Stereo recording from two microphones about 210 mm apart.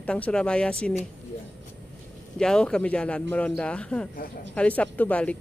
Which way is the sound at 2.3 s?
5° left (ahead or behind).